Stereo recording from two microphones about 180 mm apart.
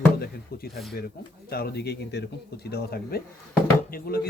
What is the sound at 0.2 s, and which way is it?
Speech, 60° left (ahead or behind).